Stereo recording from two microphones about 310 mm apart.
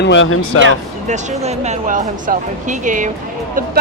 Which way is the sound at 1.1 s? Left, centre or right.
Right.